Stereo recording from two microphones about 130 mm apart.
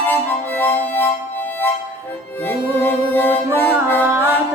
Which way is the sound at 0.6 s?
15° left (ahead or behind).